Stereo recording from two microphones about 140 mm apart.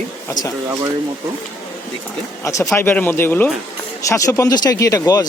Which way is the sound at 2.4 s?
20° left (ahead or behind).